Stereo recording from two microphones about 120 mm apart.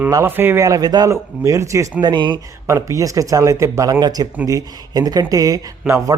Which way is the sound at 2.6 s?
25° right (ahead or behind).